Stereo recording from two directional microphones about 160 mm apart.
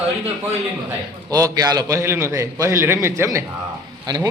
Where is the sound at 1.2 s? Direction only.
20° right (ahead or behind).